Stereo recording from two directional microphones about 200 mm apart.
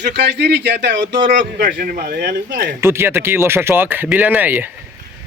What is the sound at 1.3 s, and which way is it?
Speech, 40° right (ahead or behind).